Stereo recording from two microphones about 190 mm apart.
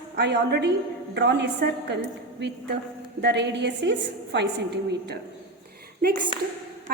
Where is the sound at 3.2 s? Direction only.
65° right (ahead or behind).